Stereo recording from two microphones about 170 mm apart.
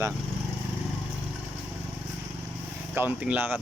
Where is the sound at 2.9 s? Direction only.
10° right (ahead or behind).